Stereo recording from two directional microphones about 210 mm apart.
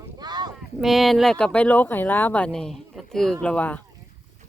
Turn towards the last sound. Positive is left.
turn(degrees=5)  # may be behind; listen again after turning